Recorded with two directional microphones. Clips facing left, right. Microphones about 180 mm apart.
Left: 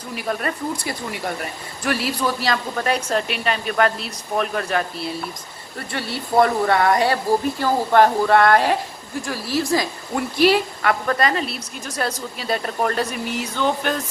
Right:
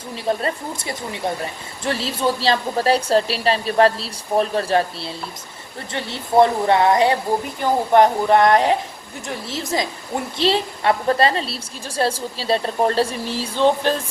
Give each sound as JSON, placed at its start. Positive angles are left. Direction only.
{"t": 0.1, "sound": "speech", "side_deg": -25}